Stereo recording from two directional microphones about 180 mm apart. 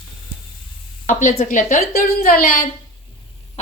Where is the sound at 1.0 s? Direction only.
45° left (ahead or behind).